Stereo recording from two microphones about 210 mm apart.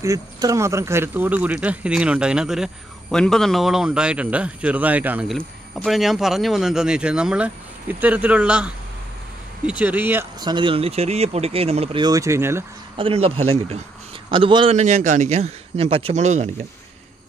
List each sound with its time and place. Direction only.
0.0 s speech: 15° right (ahead or behind)
10.4 s speech: 20° right (ahead or behind)
12.9 s speech: 25° right (ahead or behind)